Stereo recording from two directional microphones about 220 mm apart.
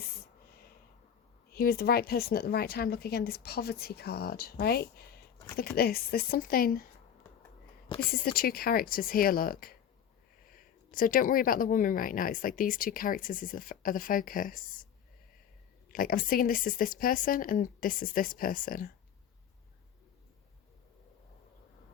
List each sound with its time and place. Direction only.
1.5 s speech: 45° left (ahead or behind)
8.1 s speech: 45° left (ahead or behind)
15.9 s speech: 40° left (ahead or behind)